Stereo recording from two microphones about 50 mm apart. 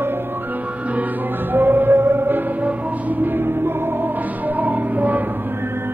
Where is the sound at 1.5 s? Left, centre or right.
Right.